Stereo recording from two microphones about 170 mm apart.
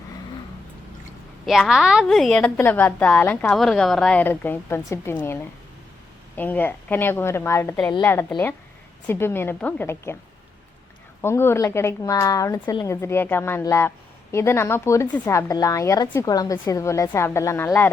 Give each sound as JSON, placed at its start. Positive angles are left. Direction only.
{"t": 1.5, "sound": "a woman's voice", "side_deg": 0}
{"t": 11.2, "sound": "a woman's voice", "side_deg": 15}